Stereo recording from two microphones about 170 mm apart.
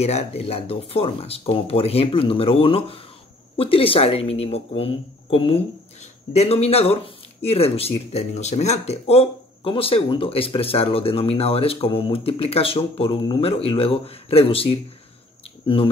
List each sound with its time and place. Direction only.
0.0 s speech: 40° left (ahead or behind)